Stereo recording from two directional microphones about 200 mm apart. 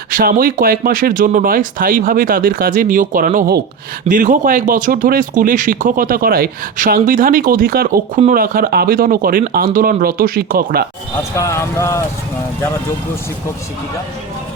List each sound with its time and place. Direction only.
0.1 s speech: 45° right (ahead or behind)
11.2 s speech: 15° left (ahead or behind)